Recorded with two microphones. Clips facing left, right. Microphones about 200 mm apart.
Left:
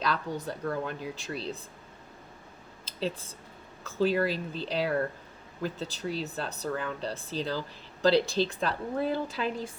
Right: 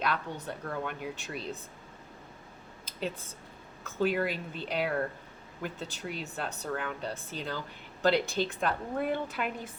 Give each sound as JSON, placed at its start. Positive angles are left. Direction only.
{"t": 0.0, "sound": "speech", "side_deg": 35}
{"t": 2.8, "sound": "a sound", "side_deg": 35}
{"t": 3.8, "sound": "speech", "side_deg": 35}